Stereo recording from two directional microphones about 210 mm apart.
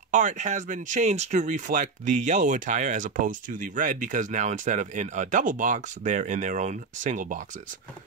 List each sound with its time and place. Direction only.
0.1 s speech: 35° right (ahead or behind)